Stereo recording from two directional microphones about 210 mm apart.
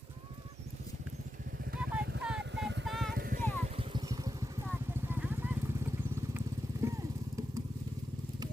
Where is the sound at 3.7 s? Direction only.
25° right (ahead or behind).